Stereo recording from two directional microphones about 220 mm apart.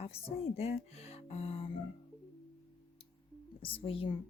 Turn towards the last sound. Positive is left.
turn(degrees=25)  # may be behind; listen again after turning